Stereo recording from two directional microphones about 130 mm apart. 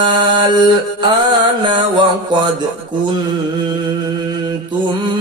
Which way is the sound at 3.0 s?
35° right (ahead or behind).